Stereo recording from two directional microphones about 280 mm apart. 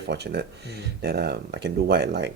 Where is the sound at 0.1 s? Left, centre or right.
Right.